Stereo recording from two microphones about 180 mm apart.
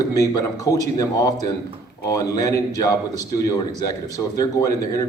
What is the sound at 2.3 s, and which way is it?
Speech, 20° left (ahead or behind).